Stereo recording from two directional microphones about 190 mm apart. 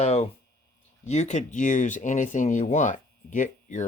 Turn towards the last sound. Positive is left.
turn(degrees=40)  # may be behind; listen again after turning